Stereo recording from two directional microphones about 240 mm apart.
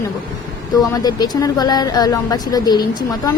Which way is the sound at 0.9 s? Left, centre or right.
Centre.